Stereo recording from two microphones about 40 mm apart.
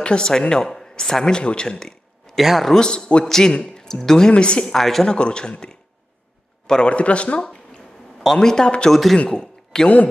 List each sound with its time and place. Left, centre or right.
0.0 s speech: left
2.3 s speech: centre
2.8 s a man's voice: centre
3.3 s speech: centre
4.3 s a man's voice: left
4.6 s speech: centre
5.0 s a man's voice: left
6.9 s speech: left
8.2 s speech: centre
8.9 s speech: centre
9.3 s a sound: centre